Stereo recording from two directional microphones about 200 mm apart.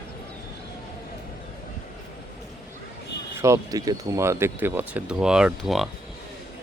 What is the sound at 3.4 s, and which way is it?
Speech, 15° right (ahead or behind).